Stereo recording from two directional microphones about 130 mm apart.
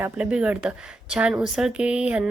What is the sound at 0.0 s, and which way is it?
A woman's voice, 10° right (ahead or behind).